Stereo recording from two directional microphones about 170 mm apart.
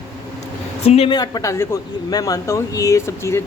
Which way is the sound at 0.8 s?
35° left (ahead or behind).